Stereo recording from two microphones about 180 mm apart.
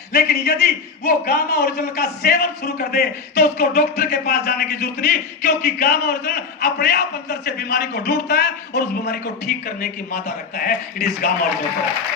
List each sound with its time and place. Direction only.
0.1 s a man's voice: 60° left (ahead or behind)